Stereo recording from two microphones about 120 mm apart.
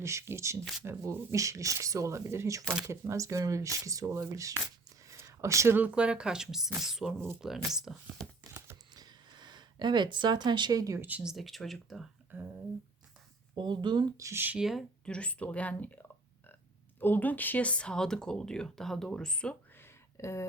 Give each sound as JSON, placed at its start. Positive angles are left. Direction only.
{"t": 0.0, "sound": "speech", "side_deg": -25}
{"t": 8.5, "sound": "a sound", "side_deg": -30}
{"t": 11.0, "sound": "speech", "side_deg": -10}
{"t": 12.3, "sound": "speech", "side_deg": -15}
{"t": 13.6, "sound": "speech", "side_deg": -40}
{"t": 14.2, "sound": "speech", "side_deg": -20}
{"t": 14.6, "sound": "speech", "side_deg": 0}
{"t": 20.1, "sound": "speech", "side_deg": 25}